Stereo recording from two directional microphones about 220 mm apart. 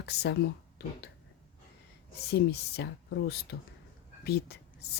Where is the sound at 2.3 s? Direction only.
50° left (ahead or behind).